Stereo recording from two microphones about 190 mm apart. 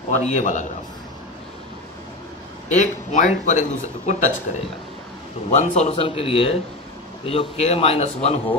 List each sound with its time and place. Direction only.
0.1 s speech: 40° left (ahead or behind)
2.7 s speech: 35° left (ahead or behind)
5.5 s speech: 35° left (ahead or behind)